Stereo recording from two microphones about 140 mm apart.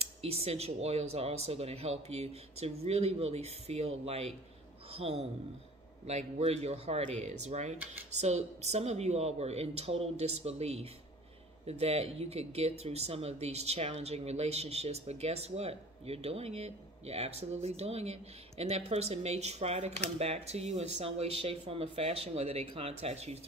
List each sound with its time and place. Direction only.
0.0 s a man's voice: 45° right (ahead or behind)